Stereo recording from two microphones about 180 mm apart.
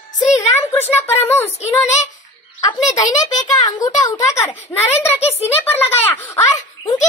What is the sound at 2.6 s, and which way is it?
A child's voice, 20° left (ahead or behind).